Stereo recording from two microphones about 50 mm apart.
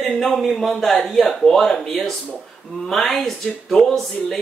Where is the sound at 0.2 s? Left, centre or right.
Centre.